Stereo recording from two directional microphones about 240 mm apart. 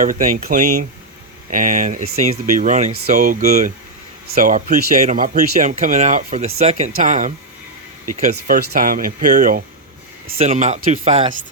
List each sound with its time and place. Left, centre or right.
0.0 s speech: right